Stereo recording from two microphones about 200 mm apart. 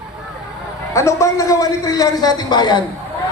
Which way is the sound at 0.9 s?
15° left (ahead or behind).